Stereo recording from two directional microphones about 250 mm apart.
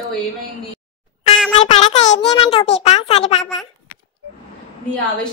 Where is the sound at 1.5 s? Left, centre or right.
Left.